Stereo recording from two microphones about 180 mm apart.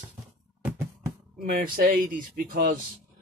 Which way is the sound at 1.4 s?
50° right (ahead or behind).